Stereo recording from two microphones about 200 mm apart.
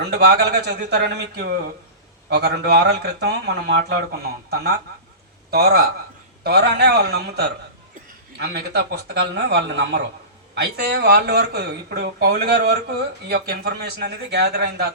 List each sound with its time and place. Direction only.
0.0 s a man's voice: 55° right (ahead or behind)